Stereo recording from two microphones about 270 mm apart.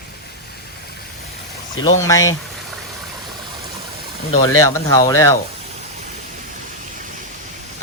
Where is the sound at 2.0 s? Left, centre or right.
Centre.